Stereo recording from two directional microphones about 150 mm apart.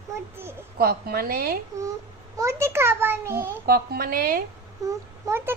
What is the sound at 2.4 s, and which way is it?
A child's voice, 20° right (ahead or behind).